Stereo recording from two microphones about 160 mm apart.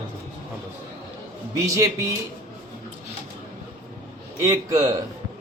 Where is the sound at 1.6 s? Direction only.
20° right (ahead or behind).